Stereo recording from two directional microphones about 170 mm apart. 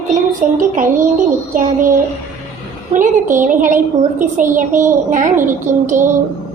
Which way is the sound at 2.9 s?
50° right (ahead or behind).